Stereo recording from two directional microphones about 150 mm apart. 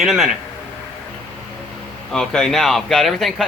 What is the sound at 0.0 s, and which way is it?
Speech, centre (ahead or behind).